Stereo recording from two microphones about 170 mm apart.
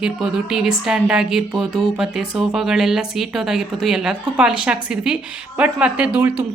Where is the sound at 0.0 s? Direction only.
5° right (ahead or behind).